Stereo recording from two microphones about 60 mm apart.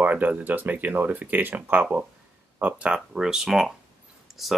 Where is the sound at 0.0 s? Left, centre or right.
Right.